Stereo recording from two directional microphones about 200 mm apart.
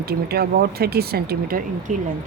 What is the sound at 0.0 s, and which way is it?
Speech, 50° right (ahead or behind).